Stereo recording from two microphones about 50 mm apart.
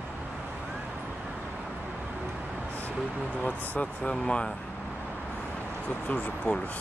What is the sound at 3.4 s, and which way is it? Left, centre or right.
Speech, left.